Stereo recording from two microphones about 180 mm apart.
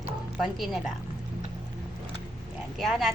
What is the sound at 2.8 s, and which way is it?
Speech, centre (ahead or behind).